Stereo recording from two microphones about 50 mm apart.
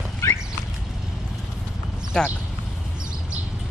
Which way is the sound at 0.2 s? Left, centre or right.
Left.